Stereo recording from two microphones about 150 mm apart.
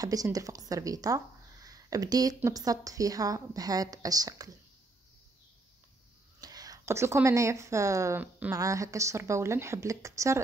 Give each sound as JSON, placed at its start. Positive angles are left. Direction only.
{"t": 0.0, "sound": "speech", "side_deg": -25}
{"t": 6.4, "sound": "speech", "side_deg": -25}